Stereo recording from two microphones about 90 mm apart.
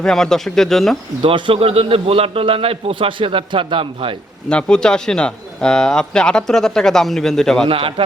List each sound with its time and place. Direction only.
0.0 s speech: 5° left (ahead or behind)
1.2 s a man's voice: 80° right
4.4 s speech: 10° left (ahead or behind)
7.7 s a man's voice: 90° right